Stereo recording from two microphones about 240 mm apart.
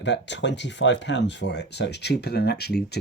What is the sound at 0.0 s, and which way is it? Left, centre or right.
Speech, left.